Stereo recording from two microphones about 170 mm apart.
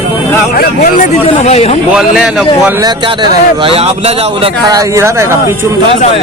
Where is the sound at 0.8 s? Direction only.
45° left (ahead or behind).